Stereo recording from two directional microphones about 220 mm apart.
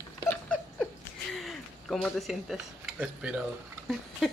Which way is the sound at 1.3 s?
Centre (ahead or behind).